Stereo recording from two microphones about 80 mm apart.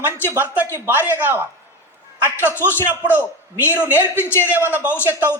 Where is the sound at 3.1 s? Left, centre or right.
Right.